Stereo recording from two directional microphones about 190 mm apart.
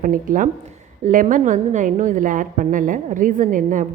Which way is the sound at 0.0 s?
45° right (ahead or behind).